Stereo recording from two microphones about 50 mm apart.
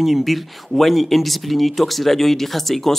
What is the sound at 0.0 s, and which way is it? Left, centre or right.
Speech, centre.